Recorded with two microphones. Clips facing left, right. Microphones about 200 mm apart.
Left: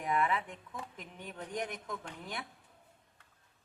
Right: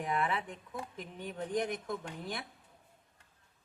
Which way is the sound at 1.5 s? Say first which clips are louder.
Right 5 dB; 30° right (ahead or behind).